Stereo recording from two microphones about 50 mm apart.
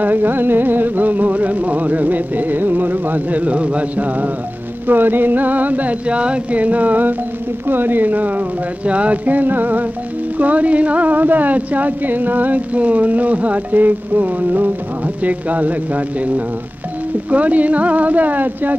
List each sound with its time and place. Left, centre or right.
0.0 s speech: right